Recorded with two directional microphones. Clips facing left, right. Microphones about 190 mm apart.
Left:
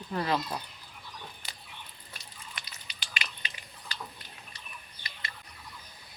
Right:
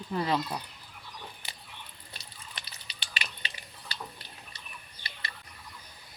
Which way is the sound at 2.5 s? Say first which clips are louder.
Even; 30° right (ahead or behind).